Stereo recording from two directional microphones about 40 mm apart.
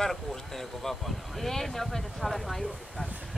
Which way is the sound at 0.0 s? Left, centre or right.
Centre.